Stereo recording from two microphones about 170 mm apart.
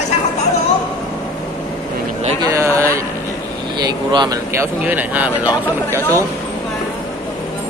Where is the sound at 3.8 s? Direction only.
25° right (ahead or behind).